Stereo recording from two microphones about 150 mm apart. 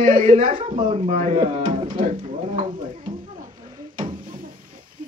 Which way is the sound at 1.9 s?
50° right (ahead or behind).